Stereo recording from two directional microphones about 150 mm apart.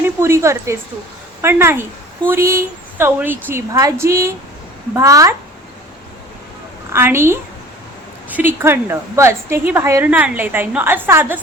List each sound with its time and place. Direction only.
0.0 s a woman's voice: 15° right (ahead or behind)
6.9 s a woman's voice: 15° right (ahead or behind)